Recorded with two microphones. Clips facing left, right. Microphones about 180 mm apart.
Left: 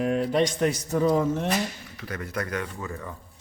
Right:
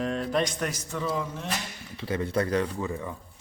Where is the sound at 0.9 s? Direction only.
40° left (ahead or behind).